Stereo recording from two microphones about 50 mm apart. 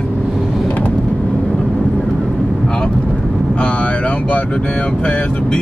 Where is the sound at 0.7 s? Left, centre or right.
Left.